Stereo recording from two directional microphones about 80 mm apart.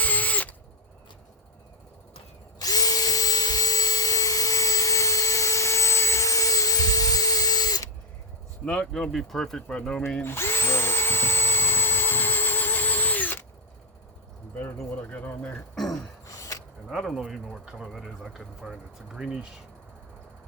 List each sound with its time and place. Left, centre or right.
0.0 s drill: centre
2.6 s drill: left
8.6 s speech: centre
10.2 s drill: left
15.0 s a sound: left
15.8 s throat clearing: centre
16.2 s a sound: left
17.0 s speech: centre
17.2 s speech: centre